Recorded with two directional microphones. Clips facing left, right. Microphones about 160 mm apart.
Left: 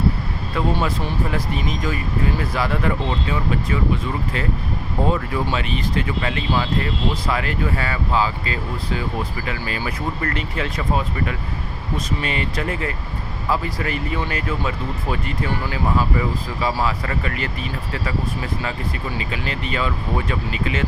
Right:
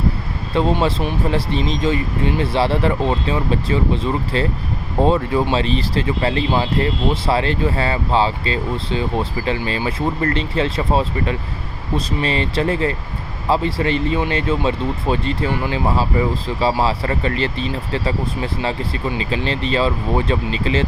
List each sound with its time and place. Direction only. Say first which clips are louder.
0.5 s speech: right 5 dB; 25° right (ahead or behind)